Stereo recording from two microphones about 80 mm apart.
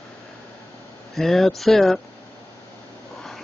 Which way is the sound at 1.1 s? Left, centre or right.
Centre.